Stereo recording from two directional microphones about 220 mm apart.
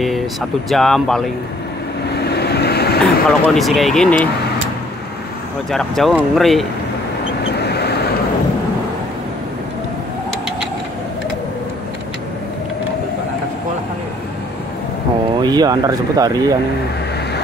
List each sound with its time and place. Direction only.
0.7 s speech: centre (ahead or behind)
2.2 s vehicle: 45° left (ahead or behind)
3.0 s speech: centre (ahead or behind)
5.7 s speech: centre (ahead or behind)
7.6 s vehicle: 50° left (ahead or behind)
15.4 s speech: 20° right (ahead or behind)